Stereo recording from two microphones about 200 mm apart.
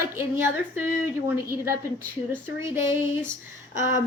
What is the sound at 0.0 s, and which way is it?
A woman's voice, 10° right (ahead or behind).